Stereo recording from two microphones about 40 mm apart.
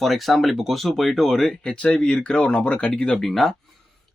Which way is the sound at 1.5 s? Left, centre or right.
Left.